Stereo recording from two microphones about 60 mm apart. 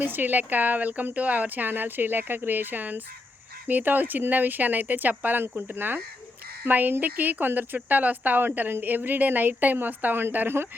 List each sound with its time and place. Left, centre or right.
0.0 s speech: right